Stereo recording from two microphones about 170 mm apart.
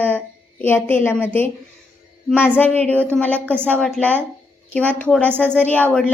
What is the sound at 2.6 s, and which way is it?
Speech, 10° left (ahead or behind).